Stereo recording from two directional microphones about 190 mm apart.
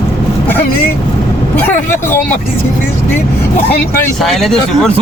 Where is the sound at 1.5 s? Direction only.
10° left (ahead or behind).